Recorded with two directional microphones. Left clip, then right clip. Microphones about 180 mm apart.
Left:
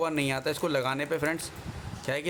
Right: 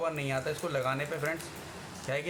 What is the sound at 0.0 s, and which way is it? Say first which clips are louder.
Speech: left 4 dB; 65° left (ahead or behind).